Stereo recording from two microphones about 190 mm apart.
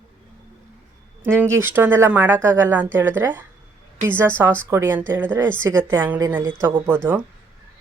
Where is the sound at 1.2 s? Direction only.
10° right (ahead or behind).